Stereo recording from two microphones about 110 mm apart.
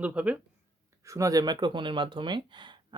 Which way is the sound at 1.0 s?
30° right (ahead or behind).